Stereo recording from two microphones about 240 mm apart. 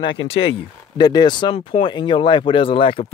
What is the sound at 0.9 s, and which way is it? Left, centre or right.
Speech, centre.